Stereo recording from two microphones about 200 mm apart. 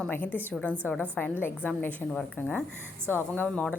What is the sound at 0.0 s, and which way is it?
A woman's voice, 10° left (ahead or behind).